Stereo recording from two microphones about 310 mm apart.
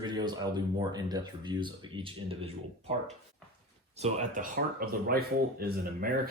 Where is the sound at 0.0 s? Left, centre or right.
Centre.